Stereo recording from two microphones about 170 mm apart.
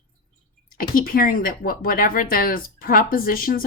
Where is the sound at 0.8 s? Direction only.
60° left (ahead or behind).